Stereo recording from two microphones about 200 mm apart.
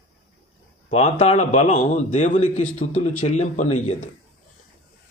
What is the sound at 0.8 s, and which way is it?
A man's voice, 30° left (ahead or behind).